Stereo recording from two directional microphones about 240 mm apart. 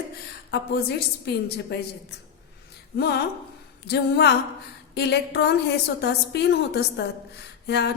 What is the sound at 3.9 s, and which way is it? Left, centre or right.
A woman's voice, left.